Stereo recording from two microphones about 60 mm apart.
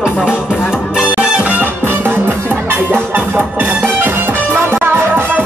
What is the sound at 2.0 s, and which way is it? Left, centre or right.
Music, right.